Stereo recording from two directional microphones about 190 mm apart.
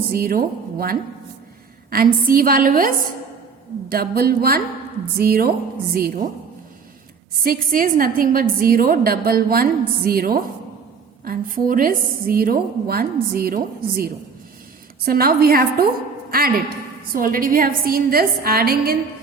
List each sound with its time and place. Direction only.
0.1 s a woman's voice: 50° right (ahead or behind)
7.4 s a woman's voice: 50° right (ahead or behind)